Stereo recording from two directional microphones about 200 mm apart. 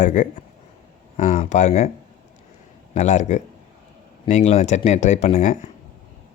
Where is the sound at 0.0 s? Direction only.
40° left (ahead or behind).